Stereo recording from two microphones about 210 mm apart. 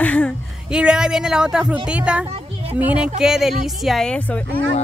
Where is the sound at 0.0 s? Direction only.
5° left (ahead or behind).